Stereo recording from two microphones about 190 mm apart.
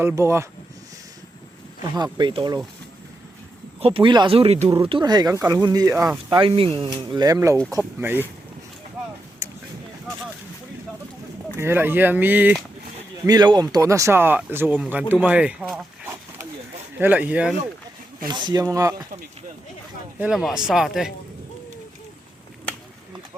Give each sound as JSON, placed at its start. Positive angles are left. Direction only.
{"t": 0.0, "sound": "speech", "side_deg": -15}
{"t": 2.0, "sound": "speech", "side_deg": -25}
{"t": 3.8, "sound": "speech", "side_deg": -30}
{"t": 6.3, "sound": "speech", "side_deg": -30}
{"t": 9.4, "sound": "a sound", "side_deg": -15}
{"t": 11.5, "sound": "speech", "side_deg": -10}
{"t": 13.2, "sound": "speech", "side_deg": -20}
{"t": 17.0, "sound": "speech", "side_deg": -10}
{"t": 18.3, "sound": "speech", "side_deg": -25}
{"t": 20.1, "sound": "speech", "side_deg": -5}